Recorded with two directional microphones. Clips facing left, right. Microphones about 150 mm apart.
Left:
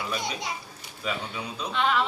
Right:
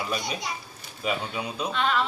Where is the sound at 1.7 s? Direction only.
15° left (ahead or behind).